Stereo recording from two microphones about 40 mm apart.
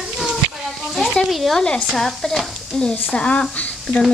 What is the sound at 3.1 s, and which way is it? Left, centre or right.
Speech, left.